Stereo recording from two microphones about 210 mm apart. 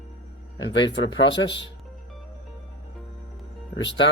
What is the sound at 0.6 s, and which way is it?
Speech, 60° left (ahead or behind).